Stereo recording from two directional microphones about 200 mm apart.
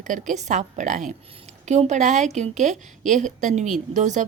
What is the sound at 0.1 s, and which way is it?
A woman's voice, 35° right (ahead or behind).